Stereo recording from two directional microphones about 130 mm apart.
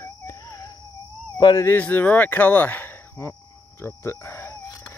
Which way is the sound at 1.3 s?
25° left (ahead or behind).